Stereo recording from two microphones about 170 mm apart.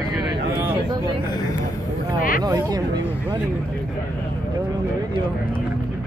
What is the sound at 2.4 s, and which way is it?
Speech, 20° right (ahead or behind).